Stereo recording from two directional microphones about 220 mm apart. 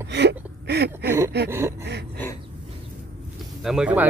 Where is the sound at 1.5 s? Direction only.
10° right (ahead or behind).